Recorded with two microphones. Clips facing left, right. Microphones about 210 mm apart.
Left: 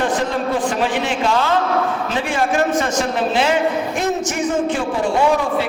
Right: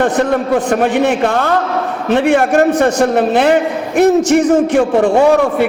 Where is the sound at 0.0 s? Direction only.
60° right (ahead or behind).